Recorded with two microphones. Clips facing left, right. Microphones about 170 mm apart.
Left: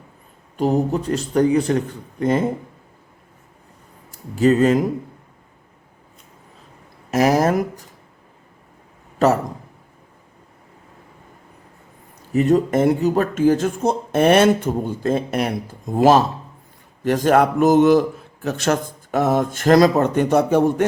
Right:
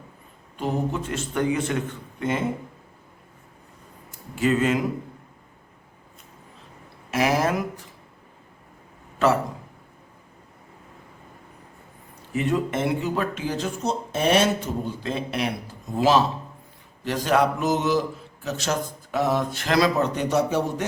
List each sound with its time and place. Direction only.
0.5 s a man's voice: 40° left (ahead or behind)
4.4 s a man's voice: 40° left (ahead or behind)
7.1 s a man's voice: 40° left (ahead or behind)
9.1 s speech: 40° left (ahead or behind)
12.3 s speech: 40° left (ahead or behind)